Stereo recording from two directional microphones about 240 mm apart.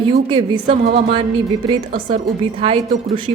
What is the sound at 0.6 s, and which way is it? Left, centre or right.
Music, right.